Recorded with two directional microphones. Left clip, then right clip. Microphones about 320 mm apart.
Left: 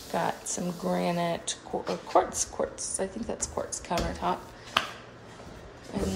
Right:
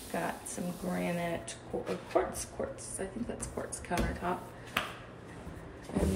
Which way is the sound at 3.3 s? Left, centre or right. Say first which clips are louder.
Left 7 dB; centre.